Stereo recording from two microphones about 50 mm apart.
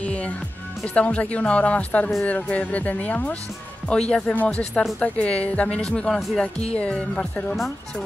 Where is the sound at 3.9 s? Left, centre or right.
Centre.